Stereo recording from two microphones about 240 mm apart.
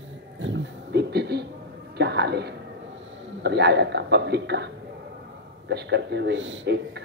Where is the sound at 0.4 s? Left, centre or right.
Right.